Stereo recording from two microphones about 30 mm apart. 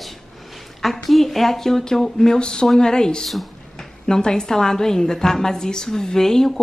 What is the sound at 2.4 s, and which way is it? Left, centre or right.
A woman's voice, left.